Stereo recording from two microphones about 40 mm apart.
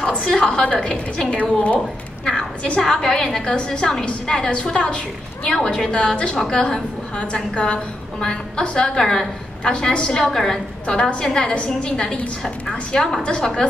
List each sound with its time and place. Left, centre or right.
0.3 s a woman's voice: centre
1.3 s a woman's voice: left
2.2 s a woman's voice: centre
9.6 s a woman's voice: left
10.2 s a woman's voice: centre
12.6 s a woman's voice: centre